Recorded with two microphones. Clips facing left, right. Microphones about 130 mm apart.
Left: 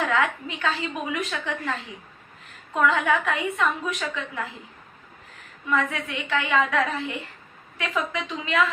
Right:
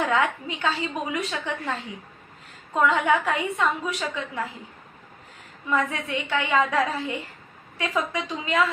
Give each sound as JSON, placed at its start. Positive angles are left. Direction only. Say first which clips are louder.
{"t": 0.1, "sound": "a woman's voice", "louder": "right 1 dB", "side_deg": -30}
{"t": 2.8, "sound": "a woman's voice", "louder": "right 1 dB", "side_deg": -25}
{"t": 5.6, "sound": "a woman's voice", "louder": "even", "side_deg": -30}